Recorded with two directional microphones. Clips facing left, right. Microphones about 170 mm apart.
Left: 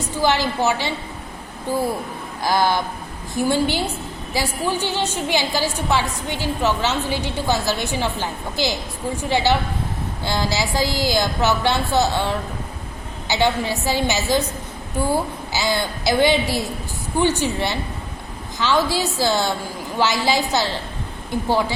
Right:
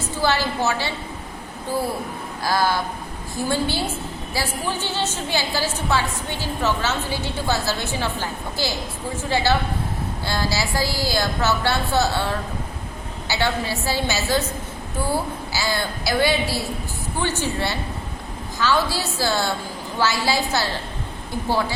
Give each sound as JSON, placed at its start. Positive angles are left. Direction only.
{"t": 0.0, "sound": "a woman's voice", "side_deg": 15}
{"t": 15.5, "sound": "a woman's voice", "side_deg": 20}